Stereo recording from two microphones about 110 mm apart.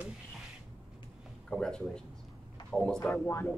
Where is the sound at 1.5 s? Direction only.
5° left (ahead or behind).